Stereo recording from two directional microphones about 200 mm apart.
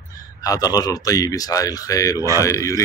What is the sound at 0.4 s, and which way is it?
Speech, 20° left (ahead or behind).